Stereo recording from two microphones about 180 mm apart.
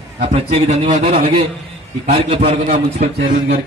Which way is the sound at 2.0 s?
30° right (ahead or behind).